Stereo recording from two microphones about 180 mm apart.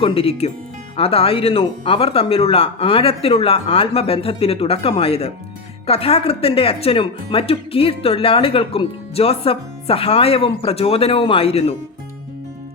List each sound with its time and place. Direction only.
0.0 s speech: 30° left (ahead or behind)